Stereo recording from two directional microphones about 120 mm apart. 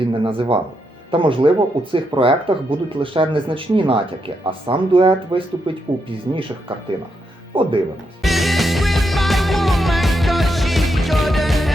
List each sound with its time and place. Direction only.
0.0 s speech: 45° right (ahead or behind)
7.5 s speech: 45° right (ahead or behind)
8.2 s music: centre (ahead or behind)